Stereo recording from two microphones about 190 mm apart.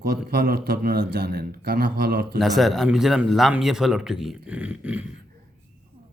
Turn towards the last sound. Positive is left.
turn(degrees=-5)  # may be behind; listen again after turning